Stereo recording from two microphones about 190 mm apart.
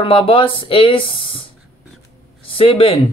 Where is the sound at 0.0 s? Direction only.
25° left (ahead or behind).